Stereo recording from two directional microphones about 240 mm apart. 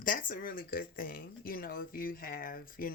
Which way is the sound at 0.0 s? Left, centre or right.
Left.